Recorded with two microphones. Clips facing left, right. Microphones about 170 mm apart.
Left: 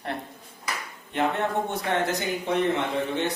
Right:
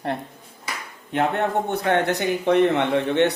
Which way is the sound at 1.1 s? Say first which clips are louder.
Right 4 dB; 65° right (ahead or behind).